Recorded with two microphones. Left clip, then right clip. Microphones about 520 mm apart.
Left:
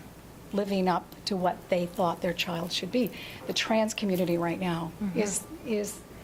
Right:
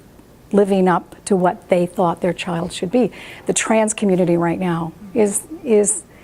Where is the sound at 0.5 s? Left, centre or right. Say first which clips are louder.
Right 13 dB; right.